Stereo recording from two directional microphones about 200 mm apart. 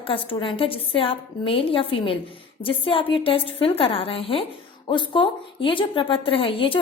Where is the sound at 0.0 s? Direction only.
25° left (ahead or behind).